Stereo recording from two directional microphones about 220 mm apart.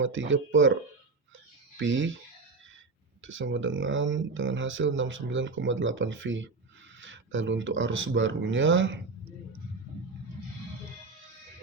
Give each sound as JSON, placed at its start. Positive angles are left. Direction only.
{"t": 0.0, "sound": "speech", "side_deg": -60}
{"t": 1.8, "sound": "speech", "side_deg": -60}
{"t": 3.2, "sound": "speech", "side_deg": -60}